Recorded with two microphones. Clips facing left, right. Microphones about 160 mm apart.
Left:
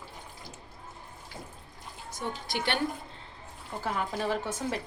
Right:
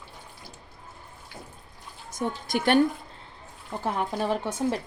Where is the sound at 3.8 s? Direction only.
30° right (ahead or behind).